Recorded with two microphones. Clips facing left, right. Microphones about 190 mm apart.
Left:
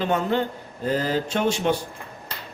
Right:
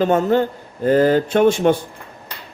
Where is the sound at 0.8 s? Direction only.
55° right (ahead or behind).